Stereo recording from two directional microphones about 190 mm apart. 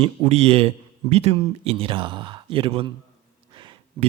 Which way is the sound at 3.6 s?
25° right (ahead or behind).